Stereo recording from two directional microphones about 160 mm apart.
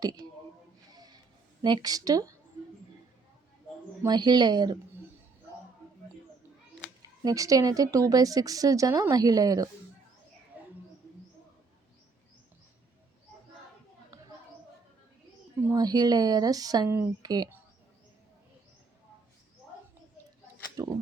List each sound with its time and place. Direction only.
0.9 s music: 25° right (ahead or behind)
1.6 s speech: 25° right (ahead or behind)
4.0 s speech: 25° right (ahead or behind)
7.3 s speech: 20° right (ahead or behind)
15.7 s speech: 25° right (ahead or behind)
20.8 s speech: 20° right (ahead or behind)